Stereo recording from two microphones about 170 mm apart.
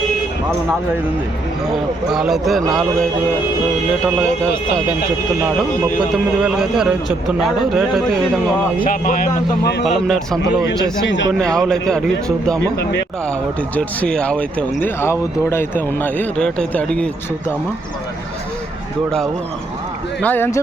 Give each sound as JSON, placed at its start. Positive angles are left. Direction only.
{"t": 2.0, "sound": "a man's voice", "side_deg": 0}
{"t": 6.4, "sound": "a man's voice", "side_deg": -5}
{"t": 8.8, "sound": "speech", "side_deg": 55}
{"t": 9.8, "sound": "a man's voice", "side_deg": 0}
{"t": 11.0, "sound": "speech", "side_deg": 90}
{"t": 11.3, "sound": "a man's voice", "side_deg": 5}
{"t": 13.7, "sound": "speech", "side_deg": 5}
{"t": 20.2, "sound": "speech", "side_deg": 10}